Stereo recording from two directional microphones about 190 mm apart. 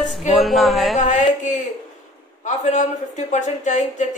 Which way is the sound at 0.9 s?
40° left (ahead or behind).